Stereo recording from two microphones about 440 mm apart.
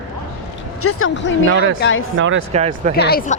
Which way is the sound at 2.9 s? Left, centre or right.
Left.